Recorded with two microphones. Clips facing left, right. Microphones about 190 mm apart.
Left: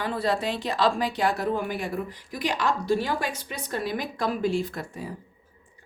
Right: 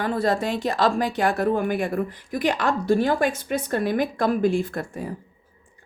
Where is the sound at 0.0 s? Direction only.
45° right (ahead or behind).